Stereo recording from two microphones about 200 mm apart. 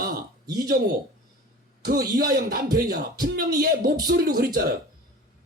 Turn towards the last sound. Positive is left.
turn(degrees=-50)  # may be behind; listen again after turning